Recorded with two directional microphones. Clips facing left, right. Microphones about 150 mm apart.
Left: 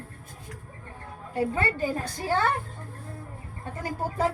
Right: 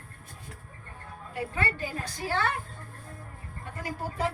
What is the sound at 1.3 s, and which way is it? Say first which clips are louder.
A woman's voice: left 5 dB; 35° left (ahead or behind).